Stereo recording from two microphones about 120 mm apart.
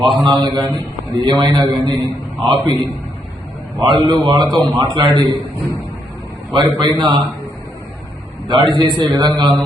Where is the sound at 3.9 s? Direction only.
Centre (ahead or behind).